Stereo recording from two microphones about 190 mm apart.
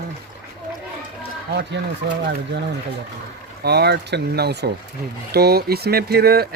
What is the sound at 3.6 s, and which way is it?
Speech, 60° right (ahead or behind).